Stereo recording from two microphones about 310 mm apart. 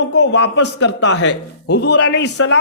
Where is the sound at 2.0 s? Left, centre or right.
Left.